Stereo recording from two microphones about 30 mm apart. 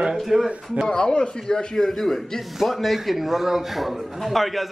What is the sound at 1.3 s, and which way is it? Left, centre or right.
Speech, left.